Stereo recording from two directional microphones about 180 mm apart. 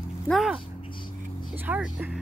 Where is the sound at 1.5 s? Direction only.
10° right (ahead or behind).